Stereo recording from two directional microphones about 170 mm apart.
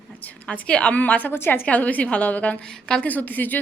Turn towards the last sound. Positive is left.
turn(degrees=10)  # may be behind; listen again after turning